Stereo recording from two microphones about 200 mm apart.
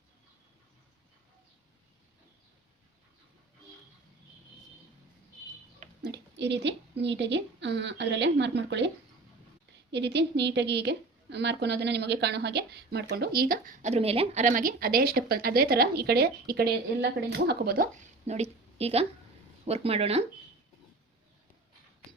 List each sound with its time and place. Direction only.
6.0 s a woman's voice: 55° right (ahead or behind)
9.9 s a woman's voice: 60° right (ahead or behind); by 20.2 s 30° right (ahead or behind)